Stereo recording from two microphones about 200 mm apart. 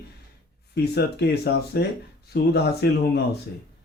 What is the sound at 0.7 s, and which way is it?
Speech, 55° left (ahead or behind).